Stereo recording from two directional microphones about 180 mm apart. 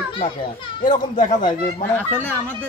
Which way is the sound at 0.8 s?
45° left (ahead or behind).